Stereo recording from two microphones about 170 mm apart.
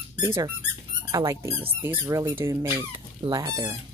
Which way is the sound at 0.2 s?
20° right (ahead or behind).